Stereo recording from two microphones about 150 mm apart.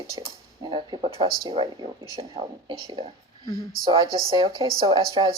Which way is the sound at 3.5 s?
25° left (ahead or behind).